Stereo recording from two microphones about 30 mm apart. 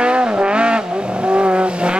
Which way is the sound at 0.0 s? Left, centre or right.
Right.